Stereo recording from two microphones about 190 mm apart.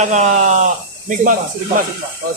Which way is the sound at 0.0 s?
40° right (ahead or behind).